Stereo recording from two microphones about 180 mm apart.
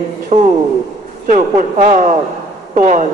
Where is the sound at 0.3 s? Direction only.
40° right (ahead or behind).